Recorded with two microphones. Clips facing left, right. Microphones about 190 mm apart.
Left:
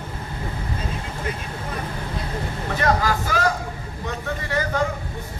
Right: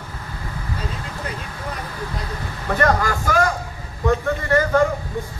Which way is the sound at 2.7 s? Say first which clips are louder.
Right 2 dB; 50° right (ahead or behind).